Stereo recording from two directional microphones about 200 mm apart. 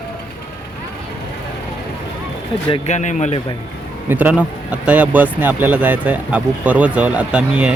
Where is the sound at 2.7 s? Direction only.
35° left (ahead or behind).